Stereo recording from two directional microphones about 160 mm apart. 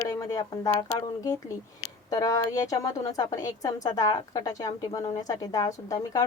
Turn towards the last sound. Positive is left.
turn(degrees=20)  # may be behind; listen again after turning